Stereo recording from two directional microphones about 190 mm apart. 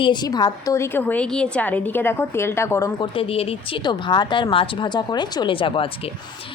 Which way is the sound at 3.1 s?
30° left (ahead or behind).